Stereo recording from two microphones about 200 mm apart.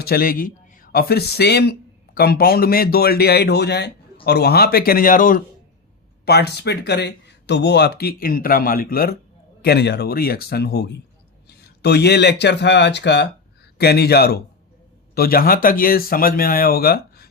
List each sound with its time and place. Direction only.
0.0 s speech: 50° left (ahead or behind)
6.2 s speech: 55° left (ahead or behind)